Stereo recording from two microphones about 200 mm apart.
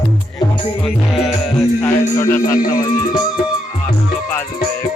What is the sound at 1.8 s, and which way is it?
Music, 15° left (ahead or behind).